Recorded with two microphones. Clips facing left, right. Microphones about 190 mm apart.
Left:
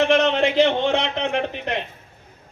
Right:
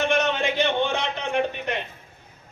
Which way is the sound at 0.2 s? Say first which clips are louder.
Left 6 dB; 80° left.